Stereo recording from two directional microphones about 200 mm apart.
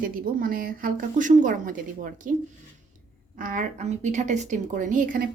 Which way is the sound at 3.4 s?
40° right (ahead or behind).